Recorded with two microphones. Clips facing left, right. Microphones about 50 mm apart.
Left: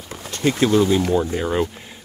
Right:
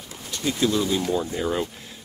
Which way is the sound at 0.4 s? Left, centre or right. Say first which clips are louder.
Left 5 dB; left.